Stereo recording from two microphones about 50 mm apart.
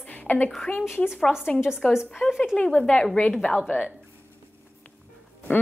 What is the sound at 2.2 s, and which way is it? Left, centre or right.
Speech, left.